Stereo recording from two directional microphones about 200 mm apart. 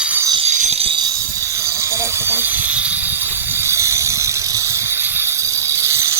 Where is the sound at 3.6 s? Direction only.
15° right (ahead or behind).